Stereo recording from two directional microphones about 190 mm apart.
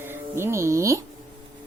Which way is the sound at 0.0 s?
10° right (ahead or behind).